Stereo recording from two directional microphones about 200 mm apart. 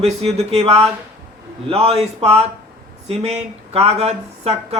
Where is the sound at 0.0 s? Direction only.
30° right (ahead or behind).